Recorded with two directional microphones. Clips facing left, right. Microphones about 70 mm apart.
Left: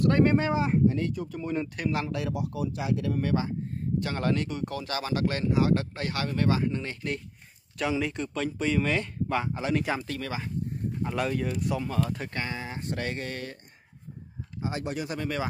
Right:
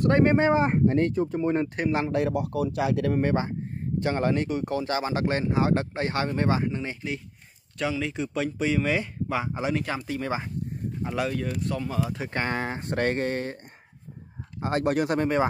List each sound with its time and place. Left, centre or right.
0.0 s speech: right
1.2 s speech: right
3.2 s speech: right
4.0 s speech: right
6.7 s speech: centre
8.0 s speech: centre
9.8 s speech: centre
11.9 s speech: centre
12.4 s speech: right
14.6 s speech: right